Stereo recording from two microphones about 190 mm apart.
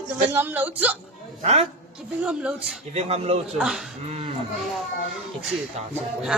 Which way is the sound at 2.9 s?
35° right (ahead or behind).